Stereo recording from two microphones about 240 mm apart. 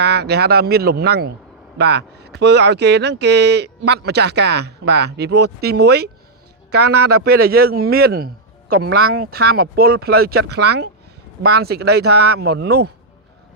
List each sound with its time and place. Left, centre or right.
0.0 s speech: right